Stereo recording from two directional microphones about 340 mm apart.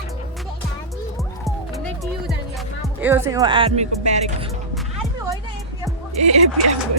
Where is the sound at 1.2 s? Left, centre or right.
Centre.